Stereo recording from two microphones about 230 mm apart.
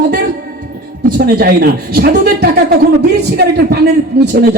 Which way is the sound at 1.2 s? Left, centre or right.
Right.